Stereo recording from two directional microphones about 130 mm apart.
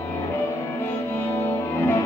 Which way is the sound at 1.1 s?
15° left (ahead or behind).